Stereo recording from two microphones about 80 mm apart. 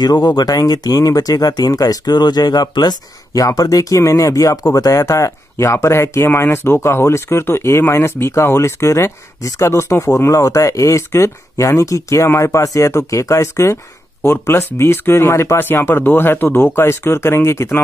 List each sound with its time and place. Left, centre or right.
0.0 s speech: left